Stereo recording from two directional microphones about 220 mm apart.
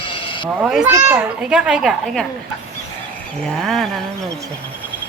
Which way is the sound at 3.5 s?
Centre (ahead or behind).